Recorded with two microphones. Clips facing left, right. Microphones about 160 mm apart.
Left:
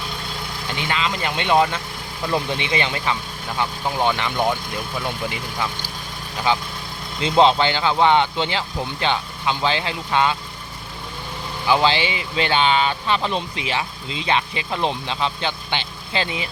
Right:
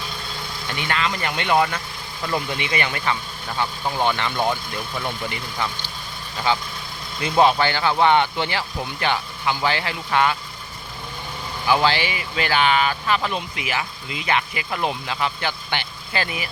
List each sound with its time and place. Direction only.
0.7 s speech: 20° left (ahead or behind)
11.7 s speech: 20° left (ahead or behind)